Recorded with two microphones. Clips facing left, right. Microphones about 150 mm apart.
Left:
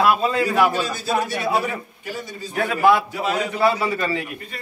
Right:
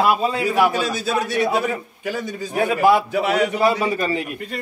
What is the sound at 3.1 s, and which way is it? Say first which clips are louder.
Speech: right 5 dB; 80° right.